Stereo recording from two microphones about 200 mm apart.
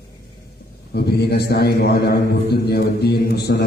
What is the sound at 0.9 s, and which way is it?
A man's voice, 55° left (ahead or behind).